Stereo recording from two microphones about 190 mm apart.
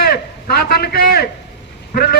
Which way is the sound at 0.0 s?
55° left (ahead or behind).